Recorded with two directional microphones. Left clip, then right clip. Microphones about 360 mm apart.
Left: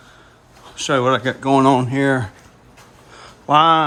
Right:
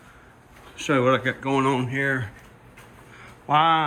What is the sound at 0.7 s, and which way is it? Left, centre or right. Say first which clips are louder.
A man's voice: left 4 dB; centre.